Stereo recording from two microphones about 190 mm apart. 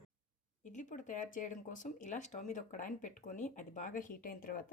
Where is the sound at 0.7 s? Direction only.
40° left (ahead or behind).